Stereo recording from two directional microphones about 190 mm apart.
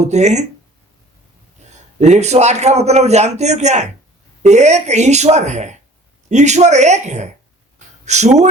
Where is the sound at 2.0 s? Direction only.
35° right (ahead or behind).